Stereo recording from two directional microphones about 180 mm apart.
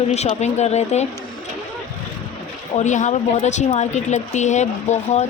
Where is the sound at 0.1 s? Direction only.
40° left (ahead or behind).